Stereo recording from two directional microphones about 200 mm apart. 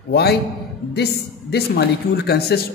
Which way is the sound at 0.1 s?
55° left (ahead or behind).